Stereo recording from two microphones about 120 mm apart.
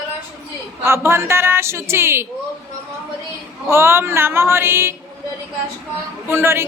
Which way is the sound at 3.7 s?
20° right (ahead or behind).